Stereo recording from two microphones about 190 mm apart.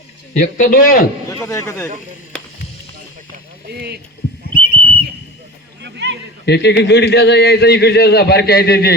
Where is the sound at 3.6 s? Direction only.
60° right (ahead or behind).